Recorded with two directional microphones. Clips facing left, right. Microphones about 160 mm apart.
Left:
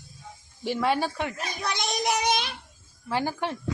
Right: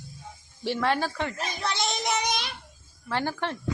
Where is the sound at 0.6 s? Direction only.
10° left (ahead or behind).